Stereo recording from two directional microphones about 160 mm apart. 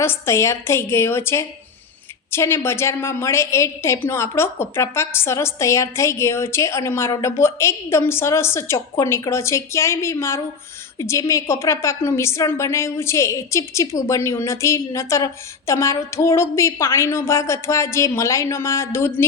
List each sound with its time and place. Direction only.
0.0 s a woman's voice: 15° left (ahead or behind)